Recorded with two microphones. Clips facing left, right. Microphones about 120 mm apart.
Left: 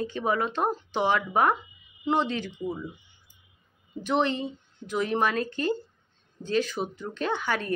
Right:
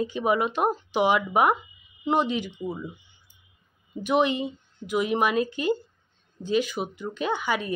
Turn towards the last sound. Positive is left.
turn(degrees=-5)  # may be behind; listen again after turning